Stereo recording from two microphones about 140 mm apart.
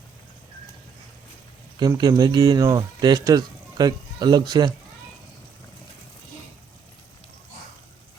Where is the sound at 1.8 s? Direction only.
25° right (ahead or behind).